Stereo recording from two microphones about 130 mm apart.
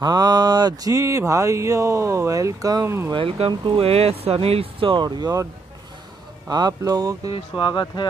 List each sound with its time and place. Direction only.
0.0 s mantra: 30° right (ahead or behind)
3.1 s speech: 45° right (ahead or behind)
6.5 s mantra: 30° right (ahead or behind)
7.2 s speech: 40° left (ahead or behind)